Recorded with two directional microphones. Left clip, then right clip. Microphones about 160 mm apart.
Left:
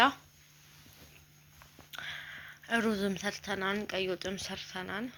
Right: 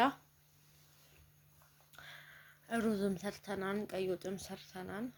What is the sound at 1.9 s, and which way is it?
Speech, 5° left (ahead or behind).